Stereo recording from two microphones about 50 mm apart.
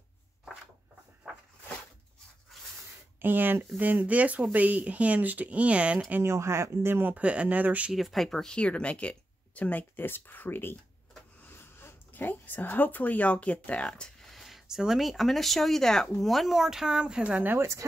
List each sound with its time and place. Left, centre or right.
3.2 s speech: right
6.2 s speech: right
6.9 s speech: right
7.2 s speech: right
7.9 s speech: centre
8.5 s speech: left
9.6 s speech: left; by 14.1 s centre
14.2 s a sound: centre
14.7 s speech: centre
17.6 s speech: right